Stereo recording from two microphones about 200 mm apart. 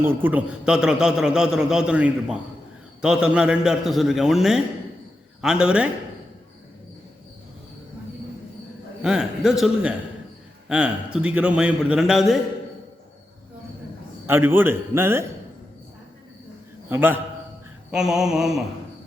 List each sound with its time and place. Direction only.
0.0 s a man's voice: 10° right (ahead or behind)
9.0 s a man's voice: 5° right (ahead or behind)
14.3 s a man's voice: 10° right (ahead or behind)
16.9 s a man's voice: 10° right (ahead or behind)